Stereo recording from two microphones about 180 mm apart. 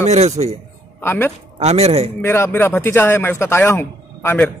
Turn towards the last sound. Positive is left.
turn(degrees=10)  # may be behind; listen again after turning